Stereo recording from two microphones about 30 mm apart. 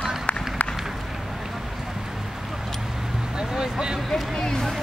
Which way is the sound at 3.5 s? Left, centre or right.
Right.